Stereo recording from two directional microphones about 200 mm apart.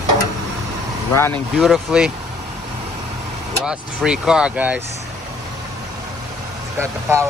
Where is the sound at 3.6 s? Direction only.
5° right (ahead or behind).